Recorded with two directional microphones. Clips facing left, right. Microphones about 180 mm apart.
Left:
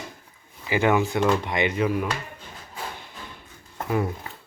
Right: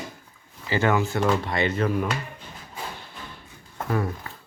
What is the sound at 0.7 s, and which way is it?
Speech, 15° left (ahead or behind).